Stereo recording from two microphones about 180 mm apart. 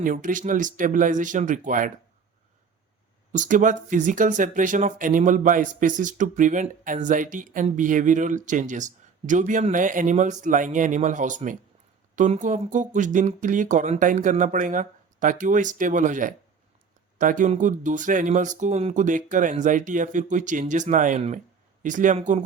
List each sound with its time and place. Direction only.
0.0 s speech: 50° right (ahead or behind)
3.3 s speech: 45° right (ahead or behind)